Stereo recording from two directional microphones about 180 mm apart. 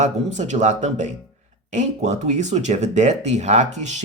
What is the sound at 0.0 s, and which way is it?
Speech, 40° right (ahead or behind).